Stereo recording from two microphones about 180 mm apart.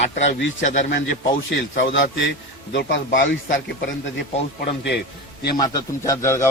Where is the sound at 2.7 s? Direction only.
70° left (ahead or behind).